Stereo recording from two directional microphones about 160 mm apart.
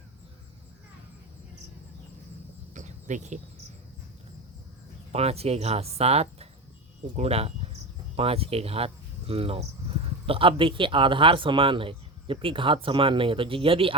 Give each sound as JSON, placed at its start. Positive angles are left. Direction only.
{"t": 2.7, "sound": "cricket", "side_deg": -50}
{"t": 5.1, "sound": "speech", "side_deg": -40}